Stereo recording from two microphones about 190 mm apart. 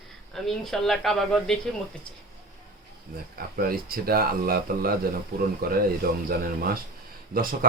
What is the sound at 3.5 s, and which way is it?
Speech, 50° right (ahead or behind).